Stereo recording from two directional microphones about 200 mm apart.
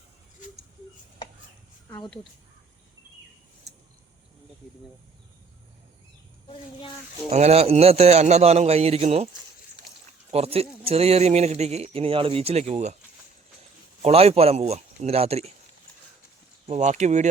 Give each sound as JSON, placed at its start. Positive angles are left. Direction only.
{"t": 6.5, "sound": "speech", "side_deg": 25}
{"t": 7.3, "sound": "speech", "side_deg": -30}
{"t": 10.3, "sound": "speech", "side_deg": -30}
{"t": 14.0, "sound": "speech", "side_deg": -30}
{"t": 16.6, "sound": "speech", "side_deg": -35}